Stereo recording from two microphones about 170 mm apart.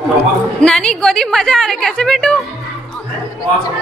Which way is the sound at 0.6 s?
5° left (ahead or behind).